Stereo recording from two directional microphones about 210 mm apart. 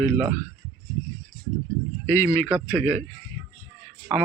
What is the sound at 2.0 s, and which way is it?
Speech, 10° left (ahead or behind).